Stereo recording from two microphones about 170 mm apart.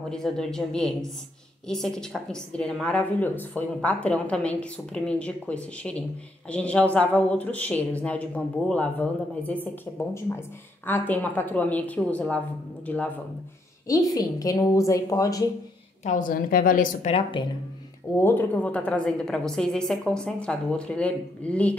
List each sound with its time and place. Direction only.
0.1 s a woman's voice: 5° left (ahead or behind)
13.8 s a woman's voice: 20° left (ahead or behind)
16.0 s a woman's voice: 50° left (ahead or behind)
17.1 s a woman's voice: 30° left (ahead or behind)
18.1 s a woman's voice: 10° left (ahead or behind)